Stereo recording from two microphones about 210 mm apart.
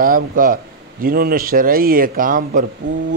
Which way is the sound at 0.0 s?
45° right (ahead or behind).